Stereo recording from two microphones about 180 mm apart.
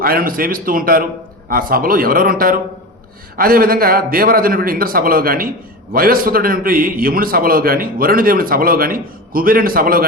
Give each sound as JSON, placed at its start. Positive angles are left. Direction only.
{"t": 0.0, "sound": "a man's voice", "side_deg": -55}